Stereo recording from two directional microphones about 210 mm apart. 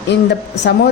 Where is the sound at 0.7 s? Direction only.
55° left (ahead or behind).